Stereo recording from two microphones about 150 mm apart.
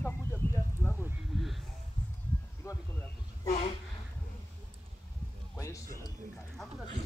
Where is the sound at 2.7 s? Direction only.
20° left (ahead or behind).